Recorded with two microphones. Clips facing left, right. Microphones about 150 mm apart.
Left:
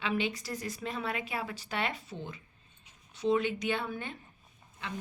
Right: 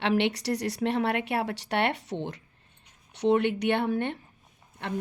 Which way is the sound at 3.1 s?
70° right (ahead or behind).